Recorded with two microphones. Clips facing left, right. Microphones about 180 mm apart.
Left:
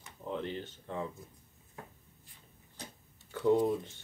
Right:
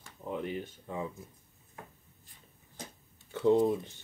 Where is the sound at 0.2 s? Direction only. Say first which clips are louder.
Right 2 dB; 10° right (ahead or behind).